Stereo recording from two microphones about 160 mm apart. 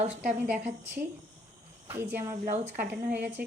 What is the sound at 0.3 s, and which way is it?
Speech, 5° right (ahead or behind).